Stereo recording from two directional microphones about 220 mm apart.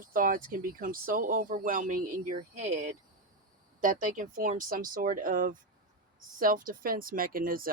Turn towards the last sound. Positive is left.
turn(degrees=-40)  # may be behind; listen again after turning